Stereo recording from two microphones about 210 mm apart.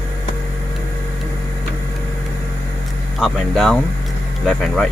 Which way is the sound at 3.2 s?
Centre (ahead or behind).